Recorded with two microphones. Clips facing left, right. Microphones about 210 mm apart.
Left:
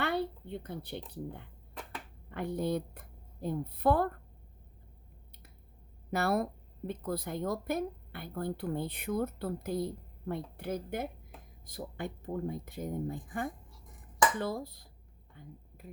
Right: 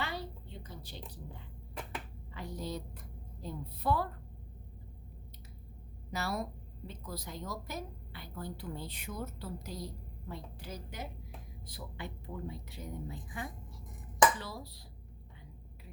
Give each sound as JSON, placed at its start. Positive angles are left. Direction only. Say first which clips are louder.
{"t": 0.0, "sound": "a woman's voice", "louder": "left 8 dB", "side_deg": 60}
{"t": 6.1, "sound": "speech", "louder": "left 7 dB", "side_deg": 55}